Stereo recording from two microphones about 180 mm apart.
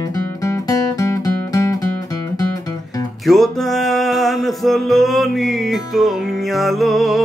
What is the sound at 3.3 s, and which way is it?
Music, centre (ahead or behind).